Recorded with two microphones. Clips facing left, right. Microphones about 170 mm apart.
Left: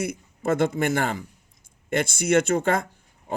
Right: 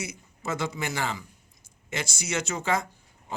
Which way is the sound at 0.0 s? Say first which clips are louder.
Left 9 dB; 55° left (ahead or behind).